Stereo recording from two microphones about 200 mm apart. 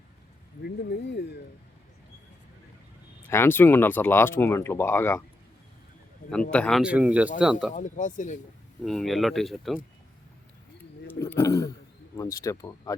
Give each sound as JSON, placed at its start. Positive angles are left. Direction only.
{"t": 0.6, "sound": "speech", "side_deg": 55}
{"t": 3.2, "sound": "speech", "side_deg": 10}
{"t": 6.5, "sound": "speech", "side_deg": 5}
{"t": 7.7, "sound": "speech", "side_deg": 40}
{"t": 8.8, "sound": "speech", "side_deg": 0}
{"t": 10.8, "sound": "a sound", "side_deg": 10}
{"t": 12.1, "sound": "speech", "side_deg": 15}